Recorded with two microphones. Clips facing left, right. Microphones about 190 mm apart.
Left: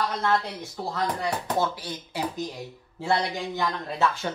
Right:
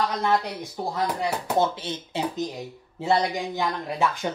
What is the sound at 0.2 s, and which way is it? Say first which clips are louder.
A man's voice: right 2 dB; 15° right (ahead or behind).